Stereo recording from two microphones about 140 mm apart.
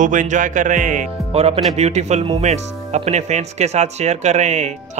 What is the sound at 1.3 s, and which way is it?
Speech, 45° right (ahead or behind).